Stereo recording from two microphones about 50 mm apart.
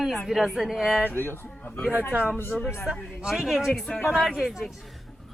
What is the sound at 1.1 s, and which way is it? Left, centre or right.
Speech, left.